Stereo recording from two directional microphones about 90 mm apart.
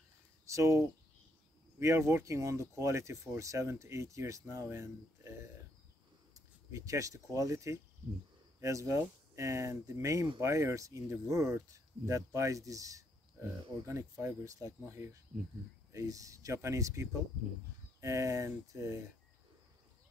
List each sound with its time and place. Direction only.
0.5 s speech: 35° right (ahead or behind)
6.7 s speech: 35° right (ahead or behind)